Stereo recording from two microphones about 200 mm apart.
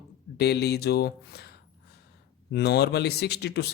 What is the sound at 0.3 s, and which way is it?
Speech, 55° left (ahead or behind).